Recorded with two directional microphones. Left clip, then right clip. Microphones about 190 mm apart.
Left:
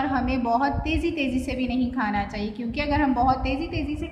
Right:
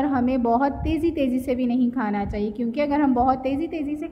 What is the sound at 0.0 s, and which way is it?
A woman's voice, 45° right (ahead or behind).